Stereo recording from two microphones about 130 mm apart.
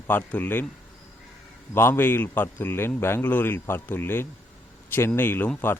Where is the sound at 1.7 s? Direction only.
15° left (ahead or behind).